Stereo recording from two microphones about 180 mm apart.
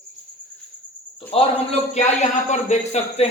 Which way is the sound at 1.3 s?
35° left (ahead or behind).